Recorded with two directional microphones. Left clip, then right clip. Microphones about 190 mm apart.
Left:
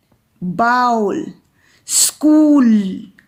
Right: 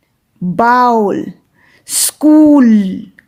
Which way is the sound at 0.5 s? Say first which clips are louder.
Right 5 dB; 45° right (ahead or behind).